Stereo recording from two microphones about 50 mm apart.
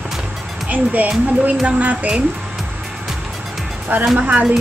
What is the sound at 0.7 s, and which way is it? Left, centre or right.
Speech, right.